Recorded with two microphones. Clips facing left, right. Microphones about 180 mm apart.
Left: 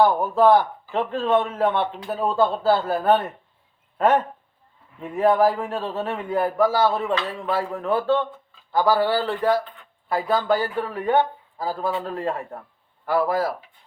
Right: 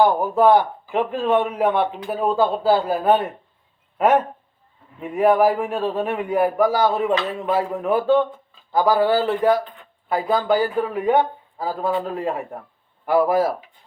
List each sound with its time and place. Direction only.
0.0 s a man's voice: 15° right (ahead or behind)